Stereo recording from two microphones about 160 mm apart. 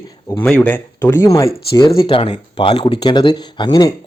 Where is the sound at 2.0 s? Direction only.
35° left (ahead or behind).